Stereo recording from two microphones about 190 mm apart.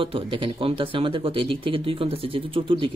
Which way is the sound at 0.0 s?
25° right (ahead or behind).